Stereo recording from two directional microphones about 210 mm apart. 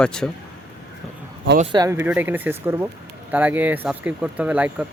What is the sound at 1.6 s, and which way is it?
Speech, 20° right (ahead or behind).